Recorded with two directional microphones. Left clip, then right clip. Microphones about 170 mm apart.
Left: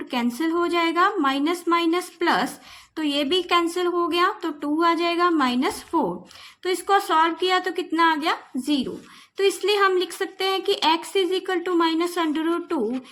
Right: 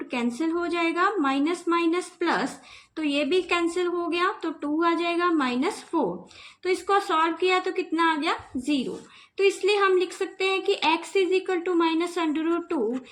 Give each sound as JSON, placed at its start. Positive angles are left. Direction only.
{"t": 0.1, "sound": "a woman's voice", "side_deg": 40}